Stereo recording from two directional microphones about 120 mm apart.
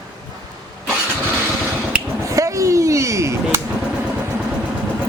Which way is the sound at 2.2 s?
25° right (ahead or behind).